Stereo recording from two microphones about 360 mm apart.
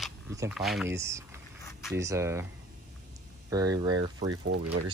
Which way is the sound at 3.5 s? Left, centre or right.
Centre.